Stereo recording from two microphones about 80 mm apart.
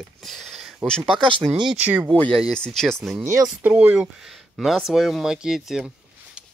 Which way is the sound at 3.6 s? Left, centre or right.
Centre.